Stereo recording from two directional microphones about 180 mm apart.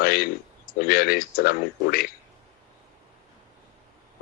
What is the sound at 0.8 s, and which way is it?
A man's voice, 55° left (ahead or behind).